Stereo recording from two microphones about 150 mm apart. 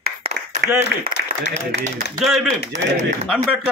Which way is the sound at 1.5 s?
45° right (ahead or behind).